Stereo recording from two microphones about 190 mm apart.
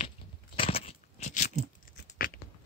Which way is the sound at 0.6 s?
30° left (ahead or behind).